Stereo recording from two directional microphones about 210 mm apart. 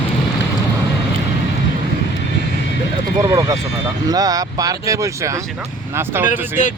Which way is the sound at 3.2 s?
15° right (ahead or behind).